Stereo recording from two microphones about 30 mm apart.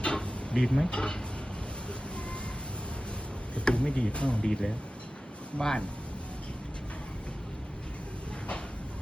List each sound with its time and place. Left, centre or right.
0.0 s a sound: left
0.9 s speech: left
3.6 s speech: left
4.4 s speech: centre